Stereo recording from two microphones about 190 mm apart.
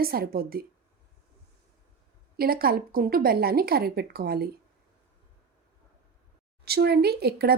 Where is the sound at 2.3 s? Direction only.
50° right (ahead or behind).